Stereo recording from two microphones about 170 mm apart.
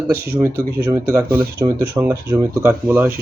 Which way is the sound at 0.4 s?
15° right (ahead or behind).